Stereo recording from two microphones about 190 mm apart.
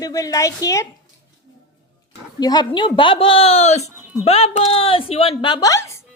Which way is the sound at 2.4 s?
20° left (ahead or behind).